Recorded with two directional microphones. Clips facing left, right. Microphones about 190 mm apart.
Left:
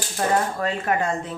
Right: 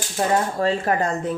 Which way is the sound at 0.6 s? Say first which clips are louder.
Right 3 dB; 30° right (ahead or behind).